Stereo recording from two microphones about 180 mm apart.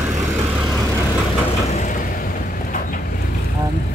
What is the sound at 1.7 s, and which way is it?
Vehicle, 45° left (ahead or behind).